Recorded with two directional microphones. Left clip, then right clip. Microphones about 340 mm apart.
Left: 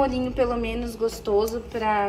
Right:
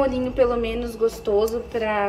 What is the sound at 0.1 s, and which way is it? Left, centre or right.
A woman's voice, centre.